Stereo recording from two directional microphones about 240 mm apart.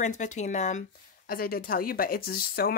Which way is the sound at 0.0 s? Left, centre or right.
Left.